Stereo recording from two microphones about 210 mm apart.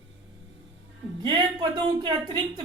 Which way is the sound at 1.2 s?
20° right (ahead or behind).